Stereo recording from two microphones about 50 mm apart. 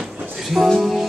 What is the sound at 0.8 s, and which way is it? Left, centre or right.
Music, centre.